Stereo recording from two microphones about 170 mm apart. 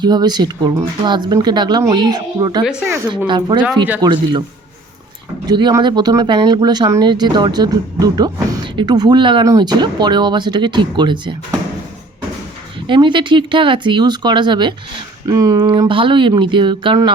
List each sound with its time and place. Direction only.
0.0 s speech: 25° right (ahead or behind)
2.6 s speech: 5° right (ahead or behind)
3.2 s speech: 25° right (ahead or behind)
5.5 s speech: 25° right (ahead or behind)
12.9 s speech: 30° right (ahead or behind)